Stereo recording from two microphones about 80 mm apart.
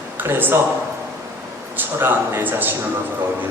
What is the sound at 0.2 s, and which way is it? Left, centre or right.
Speech, right.